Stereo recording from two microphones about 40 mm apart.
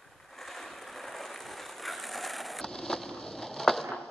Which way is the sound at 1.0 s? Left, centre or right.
Centre.